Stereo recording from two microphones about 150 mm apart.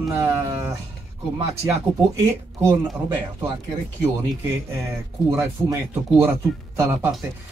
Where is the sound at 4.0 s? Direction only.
25° right (ahead or behind).